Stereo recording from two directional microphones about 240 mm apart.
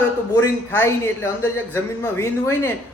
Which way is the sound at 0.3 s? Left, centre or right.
Centre.